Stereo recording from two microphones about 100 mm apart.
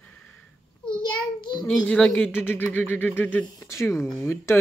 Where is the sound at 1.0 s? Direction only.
45° left (ahead or behind).